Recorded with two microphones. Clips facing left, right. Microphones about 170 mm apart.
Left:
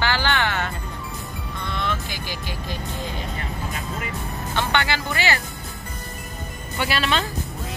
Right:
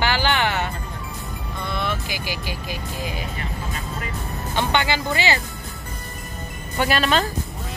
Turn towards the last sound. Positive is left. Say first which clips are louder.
# right 3 dB
turn(degrees=-45)  # may be behind; listen again after turning